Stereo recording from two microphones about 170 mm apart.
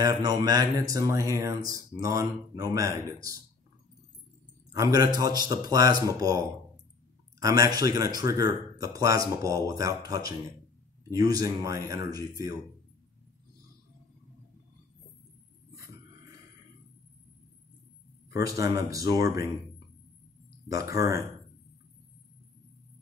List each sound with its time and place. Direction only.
0.0 s speech: 20° right (ahead or behind)
4.7 s speech: 20° right (ahead or behind)
18.3 s speech: 20° right (ahead or behind)
20.6 s speech: 20° right (ahead or behind)